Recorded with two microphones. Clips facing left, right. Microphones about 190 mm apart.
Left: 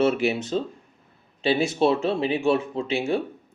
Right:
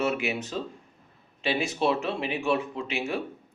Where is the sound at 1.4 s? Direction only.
30° left (ahead or behind).